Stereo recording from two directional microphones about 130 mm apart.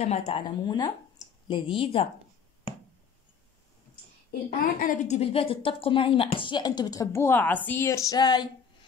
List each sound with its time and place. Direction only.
0.0 s speech: 55° left (ahead or behind)
0.4 s a woman's voice: 35° left (ahead or behind)
4.6 s a woman's voice: 90° left; by 8.5 s 30° left (ahead or behind)